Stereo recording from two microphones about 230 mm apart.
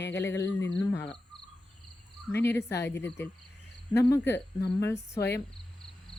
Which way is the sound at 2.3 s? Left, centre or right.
Centre.